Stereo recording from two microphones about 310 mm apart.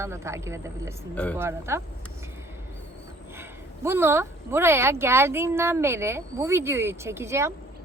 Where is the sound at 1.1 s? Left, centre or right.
Centre.